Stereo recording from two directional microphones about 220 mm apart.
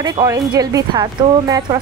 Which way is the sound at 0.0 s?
15° right (ahead or behind).